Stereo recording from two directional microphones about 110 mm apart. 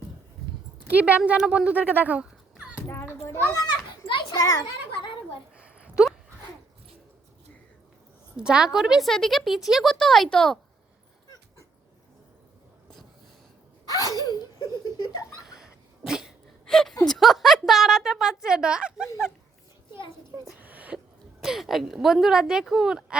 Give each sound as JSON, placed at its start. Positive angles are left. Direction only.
{"t": 0.9, "sound": "speech", "side_deg": -15}
{"t": 2.8, "sound": "children playing", "side_deg": 25}
{"t": 3.2, "sound": "a child's voice", "side_deg": 25}
{"t": 3.8, "sound": "children playing", "side_deg": 45}
{"t": 4.4, "sound": "a child's voice", "side_deg": 30}
{"t": 5.5, "sound": "a sound", "side_deg": -10}
{"t": 8.4, "sound": "speech", "side_deg": -10}
{"t": 13.9, "sound": "sneeze", "side_deg": 35}
{"t": 15.4, "sound": "cough", "side_deg": -5}
{"t": 16.6, "sound": "a woman's voice", "side_deg": 5}
{"t": 20.6, "sound": "a sound", "side_deg": -15}
{"t": 21.4, "sound": "speech", "side_deg": 0}